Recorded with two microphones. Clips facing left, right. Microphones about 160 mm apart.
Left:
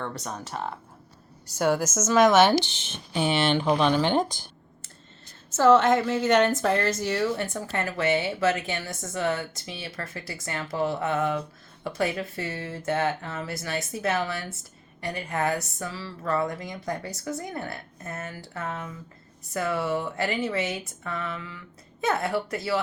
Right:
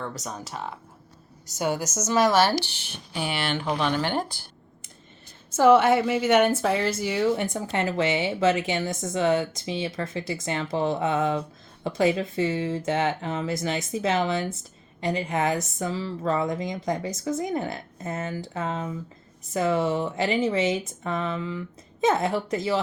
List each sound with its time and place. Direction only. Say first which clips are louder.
0.2 s speech: left 1 dB; centre (ahead or behind)
2.6 s a woman's voice: left 3 dB; 20° left (ahead or behind)
5.5 s a woman's voice: right 1 dB; 10° right (ahead or behind)
18.1 s speech: right 5 dB; 90° right
18.5 s speech: right 3 dB; 25° right (ahead or behind)